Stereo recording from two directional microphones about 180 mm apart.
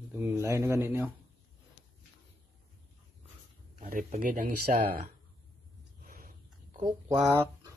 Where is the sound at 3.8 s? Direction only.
45° right (ahead or behind).